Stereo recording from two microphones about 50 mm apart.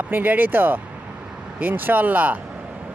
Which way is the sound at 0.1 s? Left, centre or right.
Right.